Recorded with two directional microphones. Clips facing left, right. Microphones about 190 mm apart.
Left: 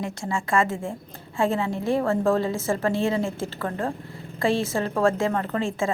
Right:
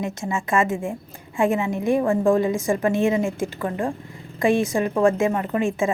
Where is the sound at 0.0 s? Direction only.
20° right (ahead or behind).